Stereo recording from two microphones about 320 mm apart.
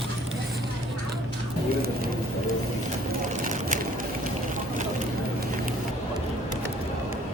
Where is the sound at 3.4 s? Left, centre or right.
Right.